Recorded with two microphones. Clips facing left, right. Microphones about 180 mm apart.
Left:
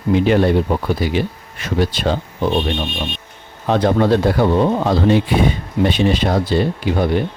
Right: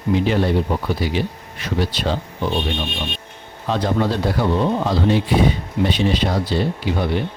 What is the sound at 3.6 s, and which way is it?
Speech, 60° left (ahead or behind).